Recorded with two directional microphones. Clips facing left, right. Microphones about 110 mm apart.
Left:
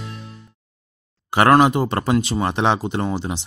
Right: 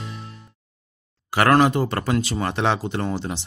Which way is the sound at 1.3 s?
20° left (ahead or behind).